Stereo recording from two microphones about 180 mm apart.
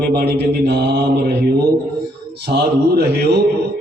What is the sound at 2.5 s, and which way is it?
Speech, 65° right (ahead or behind).